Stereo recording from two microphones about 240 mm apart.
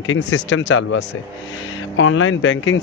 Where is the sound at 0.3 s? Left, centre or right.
Left.